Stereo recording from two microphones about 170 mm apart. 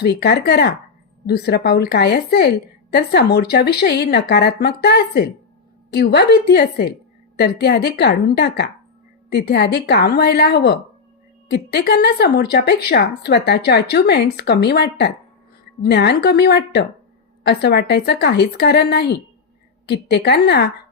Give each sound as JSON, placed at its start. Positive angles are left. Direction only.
{"t": 0.0, "sound": "a woman's voice", "side_deg": 70}